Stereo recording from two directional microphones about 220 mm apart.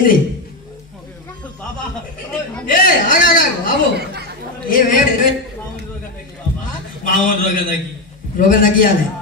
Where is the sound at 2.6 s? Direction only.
40° left (ahead or behind).